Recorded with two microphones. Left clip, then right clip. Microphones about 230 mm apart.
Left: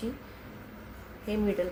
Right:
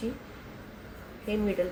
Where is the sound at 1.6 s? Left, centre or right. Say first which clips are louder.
Right 2 dB; centre.